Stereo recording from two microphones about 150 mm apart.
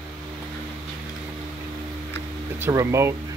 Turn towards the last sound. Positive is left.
turn(degrees=-20)  # may be behind; listen again after turning